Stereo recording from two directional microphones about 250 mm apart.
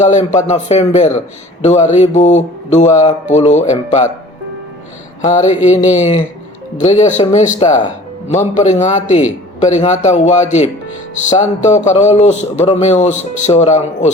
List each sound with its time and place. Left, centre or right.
0.0 s speech: left
5.3 s speech: left